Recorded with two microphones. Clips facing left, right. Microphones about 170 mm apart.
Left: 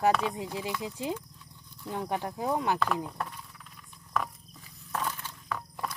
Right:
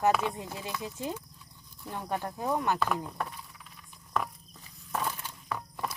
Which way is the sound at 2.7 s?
5° right (ahead or behind).